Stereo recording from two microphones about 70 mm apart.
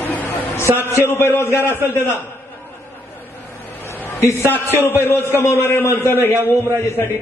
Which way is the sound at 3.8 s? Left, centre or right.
Left.